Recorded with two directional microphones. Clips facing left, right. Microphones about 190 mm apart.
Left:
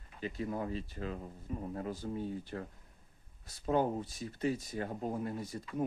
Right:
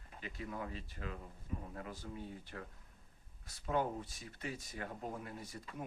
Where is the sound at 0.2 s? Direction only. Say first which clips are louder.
Left 7 dB; 35° left (ahead or behind).